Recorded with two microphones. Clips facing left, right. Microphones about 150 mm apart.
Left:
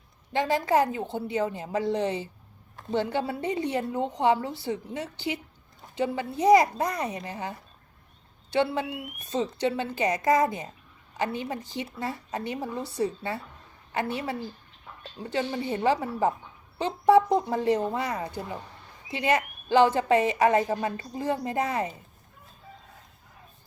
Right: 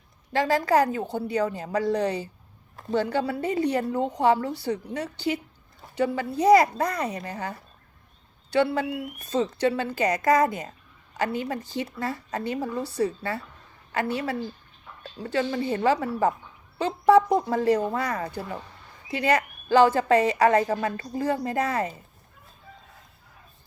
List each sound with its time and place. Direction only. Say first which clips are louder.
0.3 s a woman's voice: right 2 dB; 20° left (ahead or behind)